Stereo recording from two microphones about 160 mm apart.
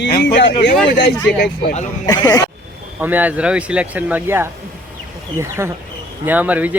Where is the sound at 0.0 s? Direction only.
90° left.